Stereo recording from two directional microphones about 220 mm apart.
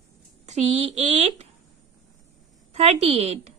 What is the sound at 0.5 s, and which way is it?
A woman's voice, 30° right (ahead or behind).